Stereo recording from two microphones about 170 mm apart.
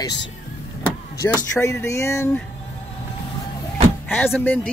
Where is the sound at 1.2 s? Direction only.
15° left (ahead or behind).